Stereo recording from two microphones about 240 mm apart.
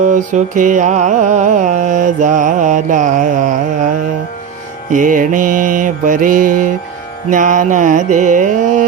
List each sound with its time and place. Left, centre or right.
0.1 s mantra: right
4.9 s mantra: right